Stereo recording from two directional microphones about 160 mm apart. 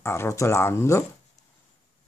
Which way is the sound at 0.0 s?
15° left (ahead or behind).